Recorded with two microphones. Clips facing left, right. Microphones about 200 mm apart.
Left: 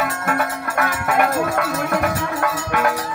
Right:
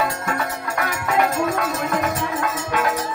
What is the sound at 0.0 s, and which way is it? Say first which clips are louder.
Music: left 2 dB; 55° left (ahead or behind).